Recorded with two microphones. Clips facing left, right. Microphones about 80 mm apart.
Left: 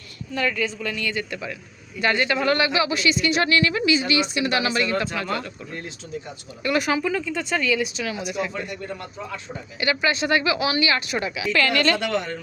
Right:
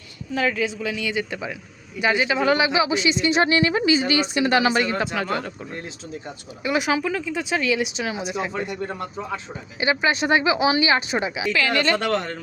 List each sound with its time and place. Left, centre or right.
0.3 s speech: centre; by 5.8 s right
6.6 s speech: centre; by 9.4 s right
9.8 s speech: centre
11.9 s speech: right